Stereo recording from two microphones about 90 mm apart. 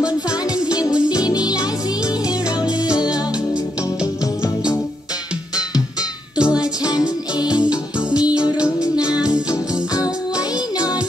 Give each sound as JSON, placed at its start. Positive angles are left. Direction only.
{"t": 0.7, "sound": "music", "side_deg": 45}
{"t": 2.8, "sound": "music", "side_deg": 50}
{"t": 6.3, "sound": "music", "side_deg": -10}
{"t": 6.8, "sound": "music", "side_deg": 45}